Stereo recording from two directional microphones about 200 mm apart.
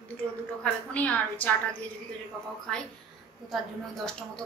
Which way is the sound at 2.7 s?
5° left (ahead or behind).